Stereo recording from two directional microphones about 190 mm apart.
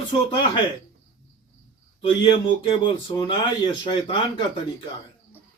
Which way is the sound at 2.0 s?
25° left (ahead or behind).